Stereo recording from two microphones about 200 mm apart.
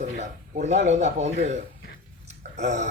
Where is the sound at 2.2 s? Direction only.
35° right (ahead or behind).